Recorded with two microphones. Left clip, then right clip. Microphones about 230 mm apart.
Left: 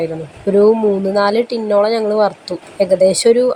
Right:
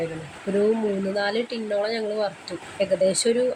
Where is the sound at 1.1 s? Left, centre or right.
Left.